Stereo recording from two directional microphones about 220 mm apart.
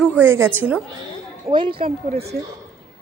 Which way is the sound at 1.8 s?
45° right (ahead or behind).